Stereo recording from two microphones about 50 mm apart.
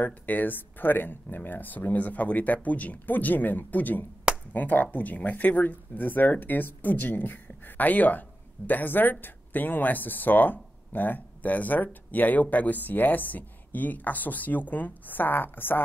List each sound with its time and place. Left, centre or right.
0.0 s speech: left